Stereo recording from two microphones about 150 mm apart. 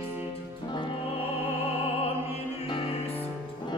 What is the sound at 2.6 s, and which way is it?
Music, 40° left (ahead or behind).